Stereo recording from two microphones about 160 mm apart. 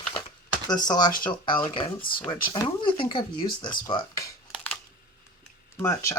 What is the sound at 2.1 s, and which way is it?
Speech, 30° left (ahead or behind).